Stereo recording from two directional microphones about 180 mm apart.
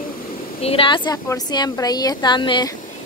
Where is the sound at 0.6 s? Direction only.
30° left (ahead or behind).